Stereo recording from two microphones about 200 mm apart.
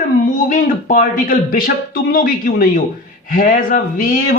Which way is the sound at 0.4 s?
40° left (ahead or behind).